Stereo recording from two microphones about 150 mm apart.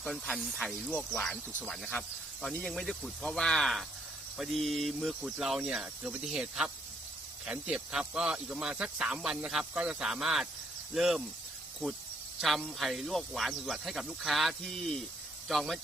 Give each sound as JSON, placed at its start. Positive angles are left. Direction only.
{"t": 0.0, "sound": "speech", "side_deg": 5}
{"t": 11.8, "sound": "speech", "side_deg": 10}